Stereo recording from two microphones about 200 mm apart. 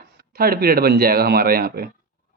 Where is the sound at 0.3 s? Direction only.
50° right (ahead or behind).